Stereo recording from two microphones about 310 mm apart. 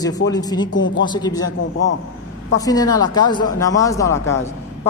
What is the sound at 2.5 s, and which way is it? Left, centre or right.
Speech, centre.